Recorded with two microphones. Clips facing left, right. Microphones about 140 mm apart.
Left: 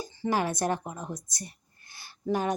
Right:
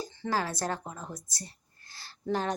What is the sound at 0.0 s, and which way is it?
Speech, 10° left (ahead or behind).